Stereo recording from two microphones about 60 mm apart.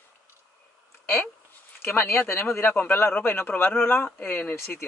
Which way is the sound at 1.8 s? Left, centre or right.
Left.